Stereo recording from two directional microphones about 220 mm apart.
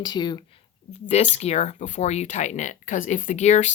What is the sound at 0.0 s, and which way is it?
Speech, 20° left (ahead or behind).